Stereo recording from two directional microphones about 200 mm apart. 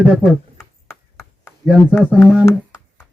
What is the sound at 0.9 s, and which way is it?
Clip-clop, 15° left (ahead or behind).